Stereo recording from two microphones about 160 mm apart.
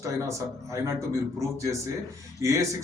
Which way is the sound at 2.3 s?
20° right (ahead or behind).